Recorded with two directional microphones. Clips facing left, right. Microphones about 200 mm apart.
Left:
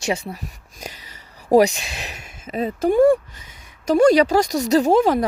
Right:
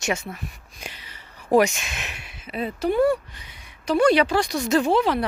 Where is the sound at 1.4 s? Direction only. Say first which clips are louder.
Left 4 dB; 35° left (ahead or behind).